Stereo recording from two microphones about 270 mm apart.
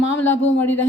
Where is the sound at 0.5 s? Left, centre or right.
Centre.